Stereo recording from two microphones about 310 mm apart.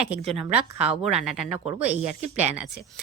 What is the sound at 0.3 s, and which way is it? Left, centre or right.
Speech, centre.